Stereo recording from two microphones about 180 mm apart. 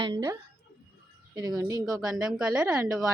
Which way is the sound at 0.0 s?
25° right (ahead or behind).